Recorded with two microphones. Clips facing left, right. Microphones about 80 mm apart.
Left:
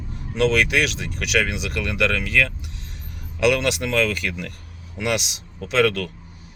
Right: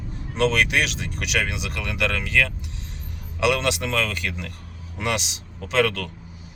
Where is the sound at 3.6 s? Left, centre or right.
Right.